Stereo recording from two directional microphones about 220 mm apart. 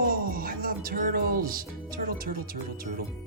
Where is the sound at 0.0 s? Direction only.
40° right (ahead or behind).